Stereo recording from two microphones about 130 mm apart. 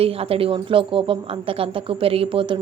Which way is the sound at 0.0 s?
50° right (ahead or behind).